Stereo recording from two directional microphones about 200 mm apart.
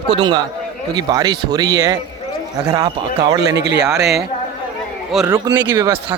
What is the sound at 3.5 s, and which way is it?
Speech, 60° right (ahead or behind).